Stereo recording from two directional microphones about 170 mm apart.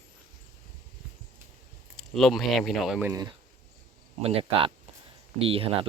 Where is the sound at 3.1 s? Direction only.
25° right (ahead or behind).